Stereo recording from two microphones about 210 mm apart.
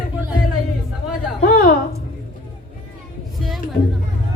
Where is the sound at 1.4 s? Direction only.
45° left (ahead or behind).